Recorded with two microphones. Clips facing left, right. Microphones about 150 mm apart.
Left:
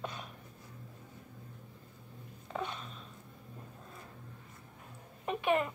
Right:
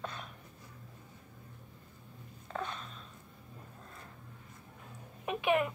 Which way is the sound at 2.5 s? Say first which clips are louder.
Left 1 dB; 5° left (ahead or behind).